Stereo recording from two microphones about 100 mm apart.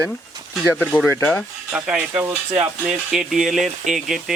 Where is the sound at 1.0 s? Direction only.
20° left (ahead or behind).